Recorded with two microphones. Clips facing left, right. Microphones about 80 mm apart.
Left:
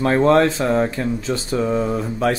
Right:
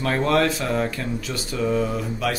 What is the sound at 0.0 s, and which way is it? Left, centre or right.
Speech, left.